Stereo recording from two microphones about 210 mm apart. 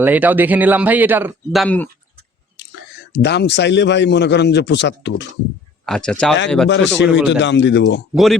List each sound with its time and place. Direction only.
0.0 s speech: 10° right (ahead or behind)
1.6 s speech: 5° left (ahead or behind)
3.1 s a man's voice: 55° left (ahead or behind)
5.8 s speech: 5° left (ahead or behind)
6.7 s a man's voice: 60° left (ahead or behind)
8.1 s speech: centre (ahead or behind)